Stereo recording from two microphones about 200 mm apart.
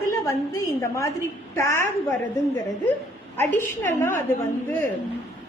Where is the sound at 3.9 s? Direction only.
10° left (ahead or behind).